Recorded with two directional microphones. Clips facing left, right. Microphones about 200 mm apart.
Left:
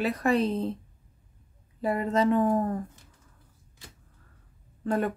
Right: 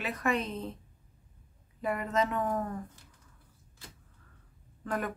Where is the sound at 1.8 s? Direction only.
30° left (ahead or behind).